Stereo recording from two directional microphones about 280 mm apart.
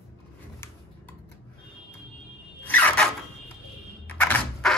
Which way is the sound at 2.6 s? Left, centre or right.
Centre.